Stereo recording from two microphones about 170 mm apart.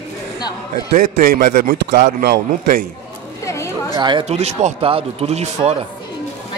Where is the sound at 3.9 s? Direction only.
25° right (ahead or behind).